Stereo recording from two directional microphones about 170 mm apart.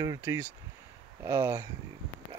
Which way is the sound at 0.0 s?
20° right (ahead or behind).